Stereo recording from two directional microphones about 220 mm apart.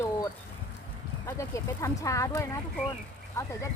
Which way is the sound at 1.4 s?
15° left (ahead or behind).